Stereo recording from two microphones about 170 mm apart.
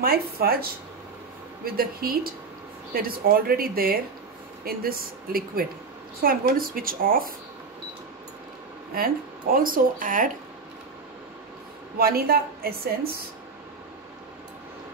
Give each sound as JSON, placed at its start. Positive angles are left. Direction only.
{"t": 0.0, "sound": "speech", "side_deg": -65}
{"t": 8.9, "sound": "speech", "side_deg": -55}
{"t": 12.0, "sound": "speech", "side_deg": -60}